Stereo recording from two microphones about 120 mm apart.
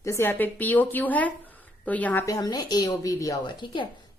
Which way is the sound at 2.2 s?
30° left (ahead or behind).